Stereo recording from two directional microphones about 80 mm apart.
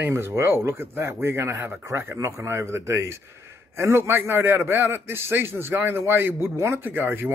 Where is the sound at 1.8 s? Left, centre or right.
Right.